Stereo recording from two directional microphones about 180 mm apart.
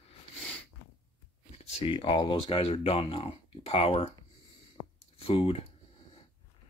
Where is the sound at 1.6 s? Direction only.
35° left (ahead or behind).